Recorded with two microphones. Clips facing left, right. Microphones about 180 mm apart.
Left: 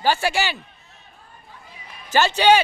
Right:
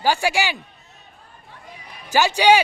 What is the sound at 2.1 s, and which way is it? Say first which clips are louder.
Speech: even; 10° right (ahead or behind).